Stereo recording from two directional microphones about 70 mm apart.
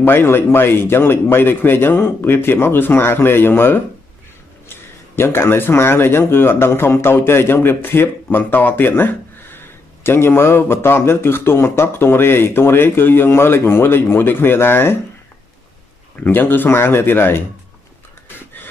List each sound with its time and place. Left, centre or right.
0.0 s speech: left
16.2 s speech: left